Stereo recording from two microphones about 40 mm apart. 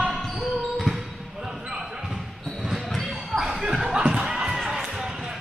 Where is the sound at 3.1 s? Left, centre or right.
Centre.